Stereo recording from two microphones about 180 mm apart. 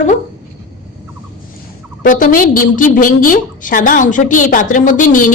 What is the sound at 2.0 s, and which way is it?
A woman's voice, 50° left (ahead or behind).